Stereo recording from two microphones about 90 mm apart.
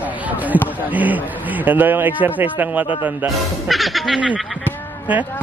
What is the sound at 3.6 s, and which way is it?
Speech, centre (ahead or behind).